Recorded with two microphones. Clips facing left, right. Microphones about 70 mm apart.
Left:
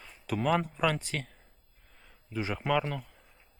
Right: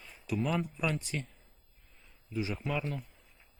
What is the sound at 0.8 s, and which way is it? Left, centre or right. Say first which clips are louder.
Speech: left 4 dB; left.